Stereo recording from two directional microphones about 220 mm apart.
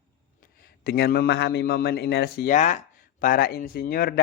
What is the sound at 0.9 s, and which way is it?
A man's voice, 45° left (ahead or behind).